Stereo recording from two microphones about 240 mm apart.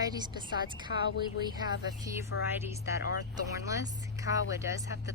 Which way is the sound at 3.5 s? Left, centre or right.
Centre.